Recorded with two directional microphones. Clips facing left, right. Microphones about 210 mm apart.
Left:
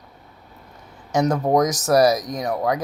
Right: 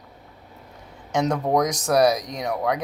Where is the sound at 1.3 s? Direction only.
5° left (ahead or behind).